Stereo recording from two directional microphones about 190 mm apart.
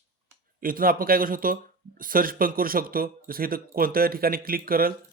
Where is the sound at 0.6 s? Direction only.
50° right (ahead or behind).